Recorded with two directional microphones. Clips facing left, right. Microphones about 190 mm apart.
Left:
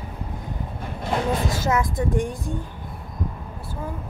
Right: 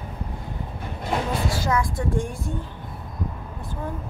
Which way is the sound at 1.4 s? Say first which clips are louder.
Left 1 dB; 20° left (ahead or behind).